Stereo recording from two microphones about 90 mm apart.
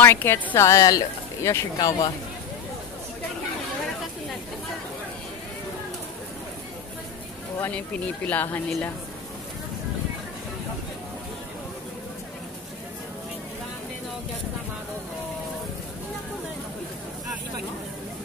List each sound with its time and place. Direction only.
0.0 s speech: 25° left (ahead or behind)
1.8 s speech: 40° left (ahead or behind)
7.5 s speech: 20° left (ahead or behind)